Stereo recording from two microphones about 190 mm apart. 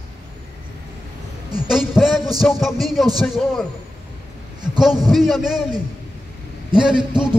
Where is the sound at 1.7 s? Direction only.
Centre (ahead or behind).